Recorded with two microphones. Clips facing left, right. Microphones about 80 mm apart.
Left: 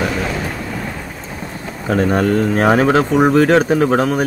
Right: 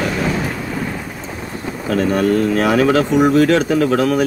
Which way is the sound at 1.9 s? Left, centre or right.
Left.